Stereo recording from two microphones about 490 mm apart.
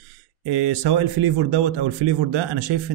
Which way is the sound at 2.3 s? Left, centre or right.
Right.